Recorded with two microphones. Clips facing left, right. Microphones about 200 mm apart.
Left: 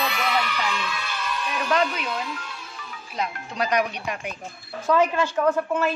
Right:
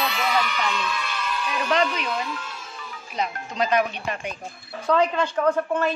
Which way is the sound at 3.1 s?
5° left (ahead or behind).